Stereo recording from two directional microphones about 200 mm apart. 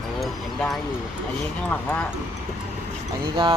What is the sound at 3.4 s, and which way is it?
Speech, 25° right (ahead or behind).